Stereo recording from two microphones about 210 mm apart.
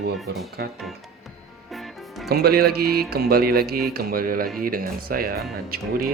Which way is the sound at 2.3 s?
50° right (ahead or behind).